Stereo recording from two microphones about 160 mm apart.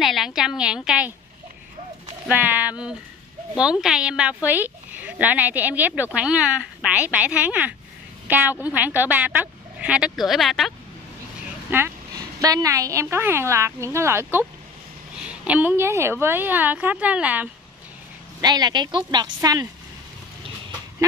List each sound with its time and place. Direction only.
0.0 s a woman's voice: centre (ahead or behind)
2.2 s a woman's voice: 10° right (ahead or behind)
11.7 s a woman's voice: 15° right (ahead or behind)
18.4 s a woman's voice: 25° right (ahead or behind)